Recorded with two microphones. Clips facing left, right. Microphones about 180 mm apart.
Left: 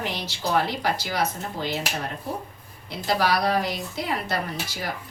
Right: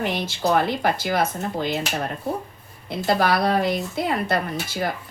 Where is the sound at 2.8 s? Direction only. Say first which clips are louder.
Right 3 dB; 55° right (ahead or behind).